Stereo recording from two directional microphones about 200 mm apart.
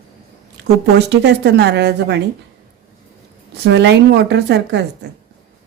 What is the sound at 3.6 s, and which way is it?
Speech, 60° right (ahead or behind).